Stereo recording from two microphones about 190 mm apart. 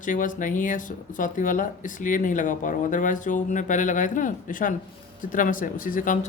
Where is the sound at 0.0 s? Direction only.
45° left (ahead or behind).